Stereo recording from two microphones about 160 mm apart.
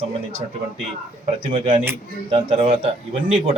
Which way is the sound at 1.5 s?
35° right (ahead or behind).